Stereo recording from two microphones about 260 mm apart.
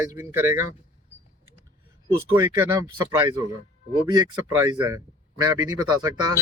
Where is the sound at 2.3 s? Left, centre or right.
Centre.